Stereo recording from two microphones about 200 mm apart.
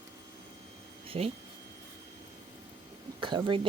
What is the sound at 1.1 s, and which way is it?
Speech, 30° right (ahead or behind).